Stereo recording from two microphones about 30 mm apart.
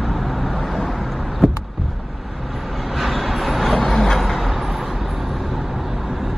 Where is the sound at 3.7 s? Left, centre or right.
Centre.